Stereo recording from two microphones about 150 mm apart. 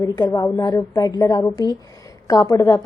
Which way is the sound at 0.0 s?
25° left (ahead or behind).